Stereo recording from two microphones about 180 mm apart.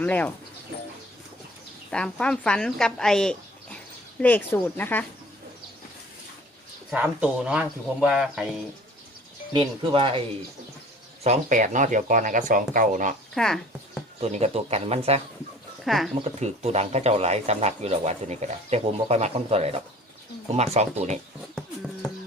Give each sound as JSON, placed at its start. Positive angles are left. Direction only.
{"t": 0.0, "sound": "speech", "side_deg": 10}
{"t": 1.9, "sound": "speech", "side_deg": 5}
{"t": 6.9, "sound": "speech", "side_deg": -5}
{"t": 9.5, "sound": "speech", "side_deg": -30}
{"t": 11.2, "sound": "speech", "side_deg": -40}
{"t": 13.3, "sound": "speech", "side_deg": 0}
{"t": 14.2, "sound": "speech", "side_deg": -35}
{"t": 15.8, "sound": "speech", "side_deg": 0}
{"t": 16.2, "sound": "speech", "side_deg": -35}
{"t": 21.5, "sound": "a sound", "side_deg": 5}